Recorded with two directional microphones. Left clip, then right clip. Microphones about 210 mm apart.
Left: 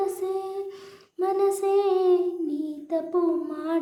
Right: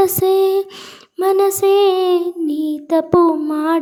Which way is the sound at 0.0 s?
50° right (ahead or behind).